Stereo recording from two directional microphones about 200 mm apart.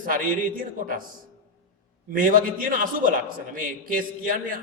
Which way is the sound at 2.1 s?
40° right (ahead or behind).